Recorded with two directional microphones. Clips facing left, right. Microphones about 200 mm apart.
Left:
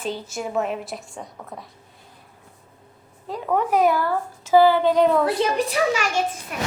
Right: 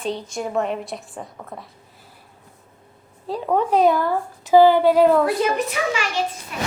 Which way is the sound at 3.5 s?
25° right (ahead or behind).